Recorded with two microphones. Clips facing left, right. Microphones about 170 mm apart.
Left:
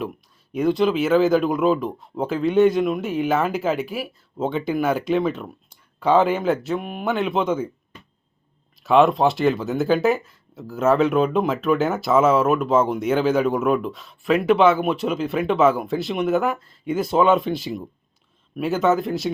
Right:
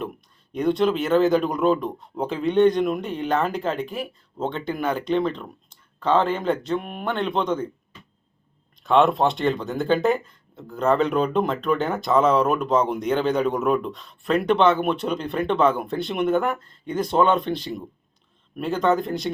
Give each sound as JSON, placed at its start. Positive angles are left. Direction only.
{"t": 0.5, "sound": "speech", "side_deg": 0}
{"t": 8.8, "sound": "speech", "side_deg": 0}